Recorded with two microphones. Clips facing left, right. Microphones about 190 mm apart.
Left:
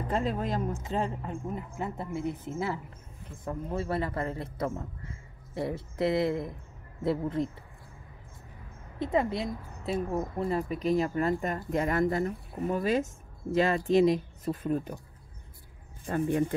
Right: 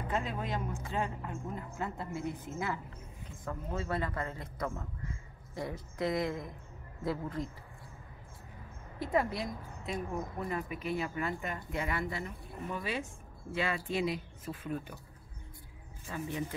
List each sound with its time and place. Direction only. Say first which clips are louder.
0.1 s speech: left 6 dB; 40° left (ahead or behind)
1.5 s a man's voice: left 2 dB; 20° left (ahead or behind)
9.0 s speech: left 4 dB; 20° left (ahead or behind); by 15.0 s 40° left (ahead or behind)
16.3 s speech: left 10 dB; 50° left (ahead or behind)